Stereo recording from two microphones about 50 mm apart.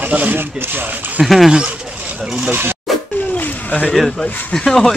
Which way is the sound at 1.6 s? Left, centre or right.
Right.